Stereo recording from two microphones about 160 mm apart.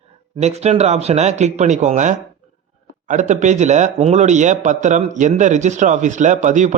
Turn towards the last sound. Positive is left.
turn(degrees=-50)  # may be behind; listen again after turning